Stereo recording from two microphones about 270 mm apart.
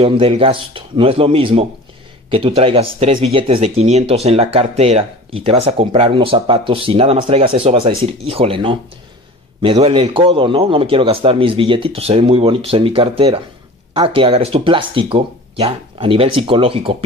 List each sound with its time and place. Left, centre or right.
0.0 s speech: right